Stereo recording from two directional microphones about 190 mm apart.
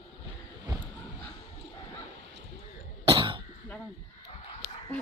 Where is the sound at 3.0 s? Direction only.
25° right (ahead or behind).